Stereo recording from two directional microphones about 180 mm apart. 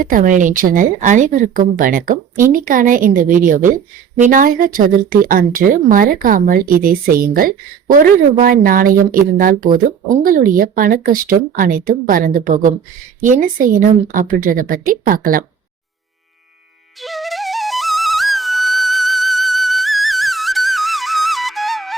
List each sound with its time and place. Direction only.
0.0 s speech: 50° right (ahead or behind)
17.0 s flute: centre (ahead or behind)